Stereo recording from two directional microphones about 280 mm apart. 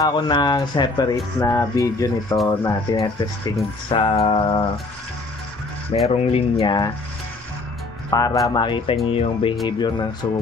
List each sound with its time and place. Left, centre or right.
0.0 s speech: centre
3.9 s music: centre
6.0 s music: left
6.6 s speech: centre
8.1 s speech: centre
9.0 s music: centre
9.7 s speech: centre